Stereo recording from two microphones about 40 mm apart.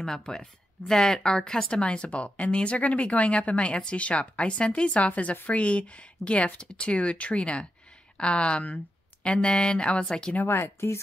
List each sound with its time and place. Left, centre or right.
0.0 s speech: centre
10.4 s speech: left